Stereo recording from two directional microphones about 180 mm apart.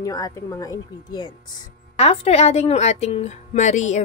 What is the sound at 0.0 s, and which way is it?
Speech, 20° left (ahead or behind).